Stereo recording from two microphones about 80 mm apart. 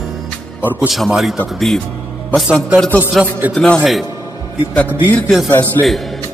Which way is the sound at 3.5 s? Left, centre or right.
Centre.